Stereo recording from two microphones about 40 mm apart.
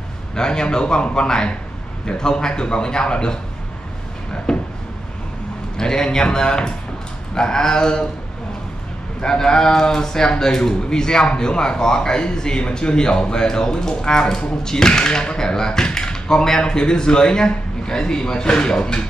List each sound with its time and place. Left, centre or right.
0.4 s speech: centre
4.5 s a sound: centre
5.8 s a man's voice: centre
9.2 s a man's voice: centre